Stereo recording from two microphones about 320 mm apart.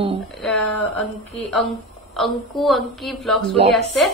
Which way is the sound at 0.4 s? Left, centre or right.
Centre.